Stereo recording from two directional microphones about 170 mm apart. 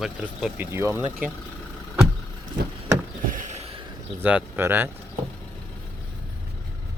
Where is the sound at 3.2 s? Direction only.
45° right (ahead or behind).